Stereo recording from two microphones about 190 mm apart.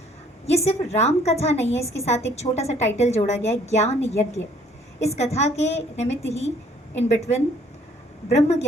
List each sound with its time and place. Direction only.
0.4 s a woman's voice: 35° left (ahead or behind)